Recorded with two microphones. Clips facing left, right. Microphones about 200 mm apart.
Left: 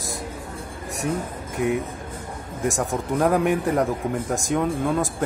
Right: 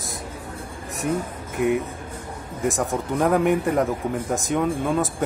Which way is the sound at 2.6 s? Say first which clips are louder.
Right 1 dB; centre (ahead or behind).